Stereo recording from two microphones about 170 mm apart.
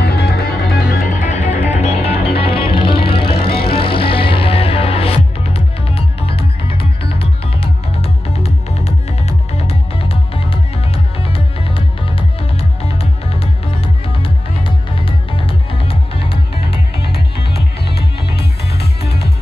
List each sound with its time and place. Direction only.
0.0 s music: 70° left (ahead or behind)
0.7 s music: 55° left (ahead or behind); by 17.2 s 35° left (ahead or behind)
18.7 s music: 70° left (ahead or behind)